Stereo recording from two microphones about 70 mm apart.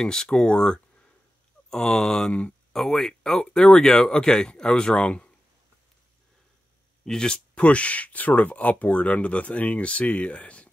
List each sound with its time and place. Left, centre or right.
0.0 s speech: centre
7.1 s speech: centre